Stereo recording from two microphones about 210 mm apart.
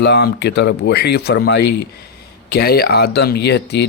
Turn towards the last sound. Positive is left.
turn(degrees=55)  # may be behind; listen again after turning